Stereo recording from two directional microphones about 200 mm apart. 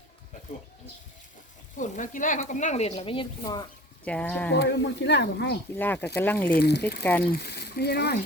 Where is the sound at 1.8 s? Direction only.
40° left (ahead or behind); by 3.6 s 20° left (ahead or behind).